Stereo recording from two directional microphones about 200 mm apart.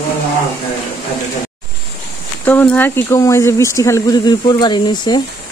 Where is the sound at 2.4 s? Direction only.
5° left (ahead or behind).